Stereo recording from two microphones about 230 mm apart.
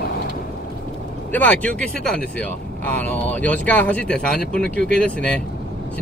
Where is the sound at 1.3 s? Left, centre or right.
Centre.